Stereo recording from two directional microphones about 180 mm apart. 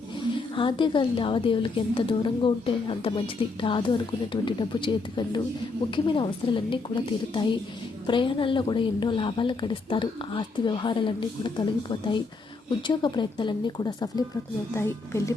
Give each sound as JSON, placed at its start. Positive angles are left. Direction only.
{"t": 0.2, "sound": "a woman's voice", "side_deg": 25}